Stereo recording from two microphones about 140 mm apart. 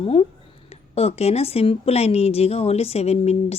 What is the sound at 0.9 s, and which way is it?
A woman's voice, 45° left (ahead or behind).